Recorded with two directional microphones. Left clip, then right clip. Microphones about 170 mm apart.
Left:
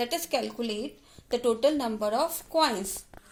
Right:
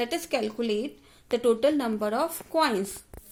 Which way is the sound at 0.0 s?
60° right (ahead or behind).